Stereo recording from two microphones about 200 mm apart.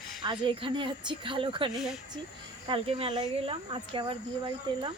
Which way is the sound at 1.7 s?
Centre (ahead or behind).